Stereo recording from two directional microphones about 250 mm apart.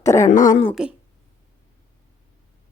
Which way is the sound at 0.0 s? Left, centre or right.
Centre.